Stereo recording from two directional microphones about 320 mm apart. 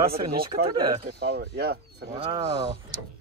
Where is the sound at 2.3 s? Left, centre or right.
Centre.